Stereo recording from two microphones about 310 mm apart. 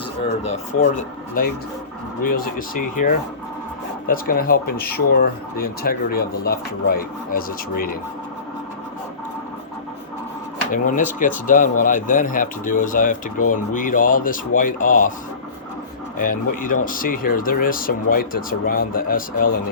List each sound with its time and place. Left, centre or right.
0.4 s speech: centre
2.2 s speech: left
10.7 s speech: left
16.1 s speech: left